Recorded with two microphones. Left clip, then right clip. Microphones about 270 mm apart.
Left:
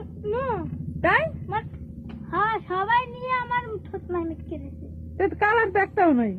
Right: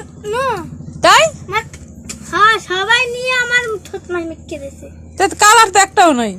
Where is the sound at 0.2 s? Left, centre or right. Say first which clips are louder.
Right 9 dB; centre.